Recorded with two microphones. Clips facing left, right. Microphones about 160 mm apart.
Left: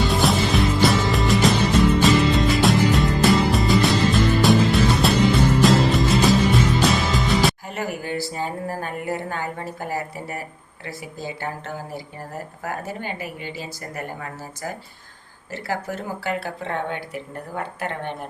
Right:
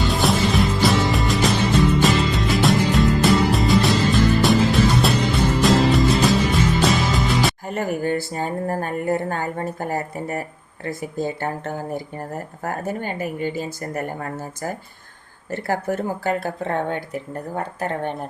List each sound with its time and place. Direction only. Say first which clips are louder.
0.0 s music: even; centre (ahead or behind)
7.7 s a woman's voice: right 5 dB; 50° right (ahead or behind)